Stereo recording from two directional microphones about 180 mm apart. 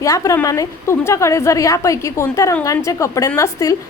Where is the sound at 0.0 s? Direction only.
20° left (ahead or behind).